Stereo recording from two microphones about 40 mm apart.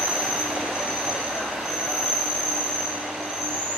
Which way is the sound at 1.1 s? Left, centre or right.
Centre.